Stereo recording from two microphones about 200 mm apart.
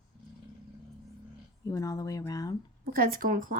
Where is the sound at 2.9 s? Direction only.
45° right (ahead or behind).